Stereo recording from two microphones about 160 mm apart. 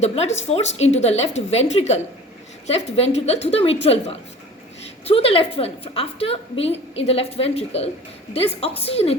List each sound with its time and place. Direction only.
0.0 s a woman's voice: 45° left (ahead or behind)